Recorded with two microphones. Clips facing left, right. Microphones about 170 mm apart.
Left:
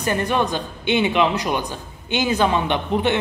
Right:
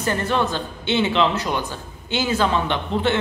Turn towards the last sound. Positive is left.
turn(degrees=15)  # may be behind; listen again after turning